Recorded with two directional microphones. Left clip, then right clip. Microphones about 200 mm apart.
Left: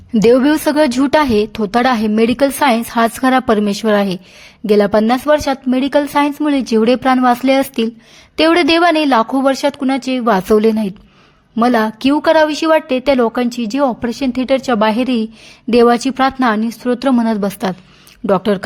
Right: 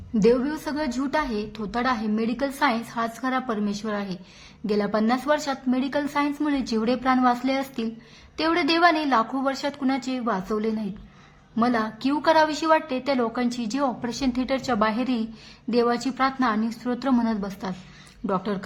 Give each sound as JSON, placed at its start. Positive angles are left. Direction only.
{"t": 0.2, "sound": "a woman's voice", "side_deg": 45}